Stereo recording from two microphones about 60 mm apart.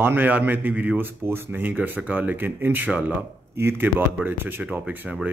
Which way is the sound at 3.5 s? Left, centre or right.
Right.